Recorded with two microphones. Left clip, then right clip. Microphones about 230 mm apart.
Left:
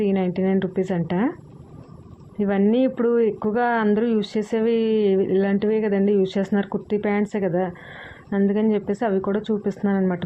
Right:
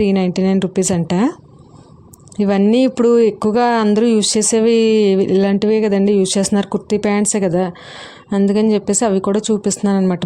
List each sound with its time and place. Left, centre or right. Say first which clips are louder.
0.0 s speech: right 6 dB; right
2.4 s speech: right 6 dB; right